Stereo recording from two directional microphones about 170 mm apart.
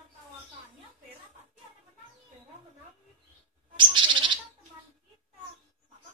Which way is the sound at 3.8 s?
30° right (ahead or behind).